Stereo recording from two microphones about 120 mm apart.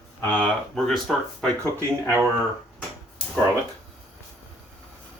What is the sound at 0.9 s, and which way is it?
Speech, centre (ahead or behind).